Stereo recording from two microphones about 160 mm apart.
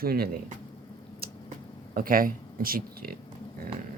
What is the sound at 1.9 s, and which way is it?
Speech, 65° right (ahead or behind).